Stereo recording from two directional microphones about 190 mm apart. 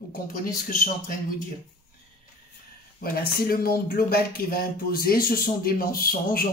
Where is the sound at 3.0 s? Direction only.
55° left (ahead or behind).